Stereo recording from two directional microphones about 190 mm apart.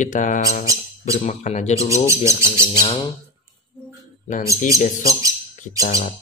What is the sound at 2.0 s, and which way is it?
Speech, 15° right (ahead or behind).